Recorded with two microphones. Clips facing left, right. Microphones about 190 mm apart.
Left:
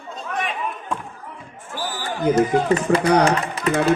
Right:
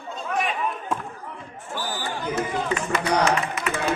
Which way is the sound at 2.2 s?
45° left (ahead or behind).